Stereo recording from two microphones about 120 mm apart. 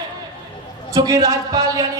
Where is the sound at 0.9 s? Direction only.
30° right (ahead or behind).